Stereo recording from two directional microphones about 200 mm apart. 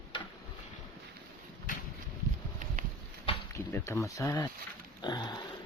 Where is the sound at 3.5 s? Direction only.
15° left (ahead or behind).